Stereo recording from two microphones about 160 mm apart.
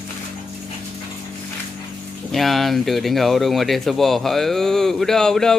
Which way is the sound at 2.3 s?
Centre (ahead or behind).